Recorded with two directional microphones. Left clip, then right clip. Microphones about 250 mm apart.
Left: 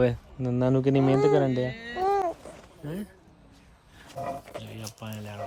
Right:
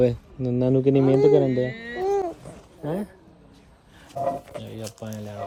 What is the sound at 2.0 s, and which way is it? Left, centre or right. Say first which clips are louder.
Babbling: right 1 dB; centre.